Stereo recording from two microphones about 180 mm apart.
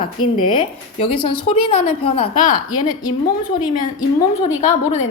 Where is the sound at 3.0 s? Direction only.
20° left (ahead or behind).